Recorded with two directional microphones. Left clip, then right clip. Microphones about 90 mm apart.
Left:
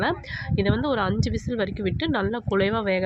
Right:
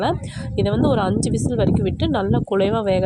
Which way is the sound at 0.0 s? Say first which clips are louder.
Right 3 dB; 35° right (ahead or behind).